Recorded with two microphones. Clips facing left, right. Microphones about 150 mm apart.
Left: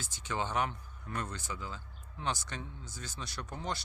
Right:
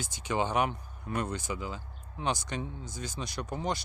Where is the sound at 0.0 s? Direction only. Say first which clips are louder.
Right 6 dB; 15° right (ahead or behind).